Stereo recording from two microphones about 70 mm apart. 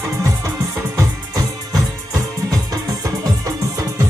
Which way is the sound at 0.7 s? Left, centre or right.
Right.